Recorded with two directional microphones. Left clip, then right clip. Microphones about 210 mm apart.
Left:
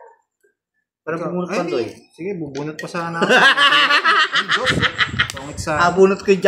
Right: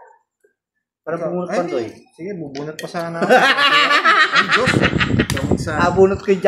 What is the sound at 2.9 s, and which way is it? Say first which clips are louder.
Speech: right 2 dB; 35° left (ahead or behind).